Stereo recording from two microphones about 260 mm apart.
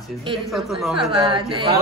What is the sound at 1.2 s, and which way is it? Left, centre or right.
Speech, centre.